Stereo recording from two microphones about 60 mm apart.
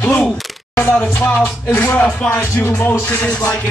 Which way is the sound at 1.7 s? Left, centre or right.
Left.